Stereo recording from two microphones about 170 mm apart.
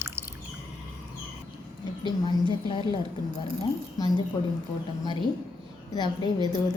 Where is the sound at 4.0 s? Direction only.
25° left (ahead or behind).